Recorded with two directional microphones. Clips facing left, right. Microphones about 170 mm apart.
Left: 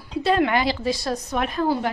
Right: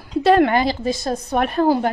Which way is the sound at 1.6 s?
40° right (ahead or behind).